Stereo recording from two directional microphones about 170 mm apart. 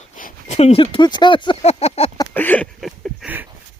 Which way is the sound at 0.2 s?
50° left (ahead or behind).